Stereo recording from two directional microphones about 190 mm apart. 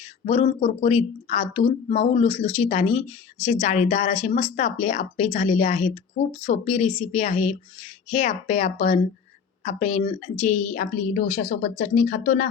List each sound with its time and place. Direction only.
0.3 s speech: 35° left (ahead or behind); by 12.5 s 50° left (ahead or behind)